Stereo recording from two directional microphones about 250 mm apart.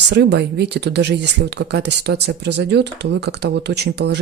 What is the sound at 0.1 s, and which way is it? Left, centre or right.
Speech, right.